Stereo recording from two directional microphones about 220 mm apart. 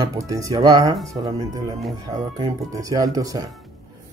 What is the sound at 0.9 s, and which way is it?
Speech, centre (ahead or behind).